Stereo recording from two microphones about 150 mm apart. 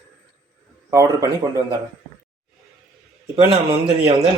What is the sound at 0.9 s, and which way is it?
Speech, 20° right (ahead or behind).